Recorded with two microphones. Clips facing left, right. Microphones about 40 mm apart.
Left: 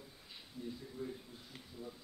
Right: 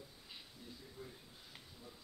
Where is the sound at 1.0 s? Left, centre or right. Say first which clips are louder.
Left 10 dB; centre.